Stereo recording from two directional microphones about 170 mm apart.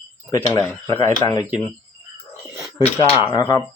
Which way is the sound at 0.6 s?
10° left (ahead or behind).